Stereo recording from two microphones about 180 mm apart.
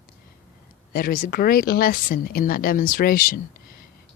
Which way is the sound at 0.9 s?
55° left (ahead or behind).